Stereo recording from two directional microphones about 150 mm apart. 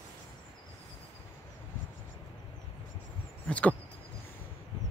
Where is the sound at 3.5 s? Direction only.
10° left (ahead or behind).